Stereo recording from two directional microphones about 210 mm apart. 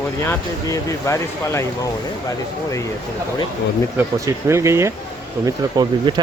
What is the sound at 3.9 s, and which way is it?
Speech, 10° right (ahead or behind).